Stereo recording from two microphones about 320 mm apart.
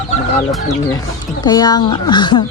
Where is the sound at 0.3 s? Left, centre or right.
Centre.